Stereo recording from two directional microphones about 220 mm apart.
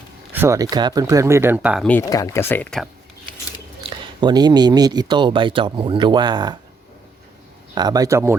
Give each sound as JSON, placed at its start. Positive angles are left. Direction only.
{"t": 0.3, "sound": "speech", "side_deg": -15}
{"t": 1.9, "sound": "speech", "side_deg": 10}
{"t": 3.8, "sound": "speech", "side_deg": -20}
{"t": 7.8, "sound": "speech", "side_deg": -15}